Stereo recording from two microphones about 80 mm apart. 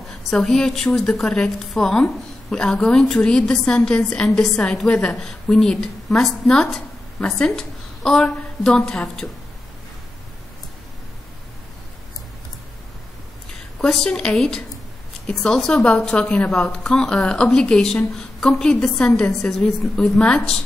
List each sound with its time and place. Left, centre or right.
0.3 s a woman's voice: centre
13.7 s speech: centre